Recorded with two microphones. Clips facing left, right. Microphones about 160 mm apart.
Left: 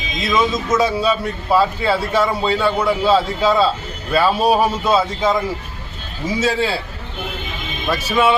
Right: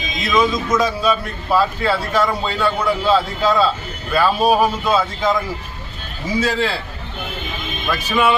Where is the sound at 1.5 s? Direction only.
25° left (ahead or behind).